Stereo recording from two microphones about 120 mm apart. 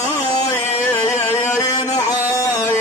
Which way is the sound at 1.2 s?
25° left (ahead or behind).